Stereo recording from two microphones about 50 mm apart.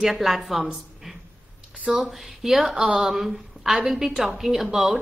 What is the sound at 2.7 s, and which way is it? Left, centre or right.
Speech, centre.